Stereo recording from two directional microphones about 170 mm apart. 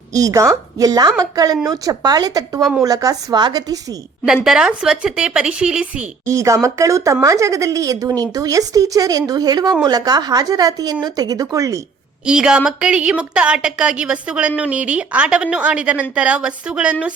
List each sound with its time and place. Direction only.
0.1 s a woman's voice: 20° right (ahead or behind)
2.6 s a woman's voice: centre (ahead or behind)
2.8 s a woman's voice: 20° right (ahead or behind)
4.4 s a woman's voice: 5° right (ahead or behind)
6.2 s a woman's voice: 20° right (ahead or behind)
12.2 s a woman's voice: 5° right (ahead or behind)